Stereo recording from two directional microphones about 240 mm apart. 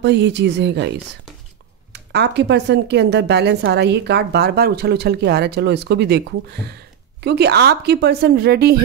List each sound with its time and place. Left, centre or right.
0.0 s speech: right